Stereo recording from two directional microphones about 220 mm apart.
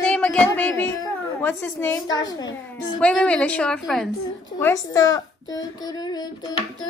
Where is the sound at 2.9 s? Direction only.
5° left (ahead or behind).